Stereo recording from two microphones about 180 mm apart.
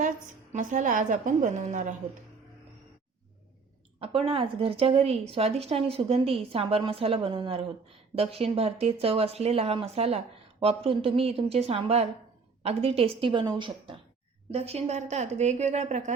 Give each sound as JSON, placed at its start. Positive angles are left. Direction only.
{"t": 0.5, "sound": "a woman's voice", "side_deg": -45}
{"t": 4.0, "sound": "a woman's voice", "side_deg": -30}